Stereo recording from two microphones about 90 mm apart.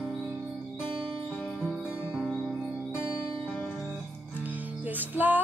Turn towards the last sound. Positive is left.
turn(degrees=-20)  # may be behind; listen again after turning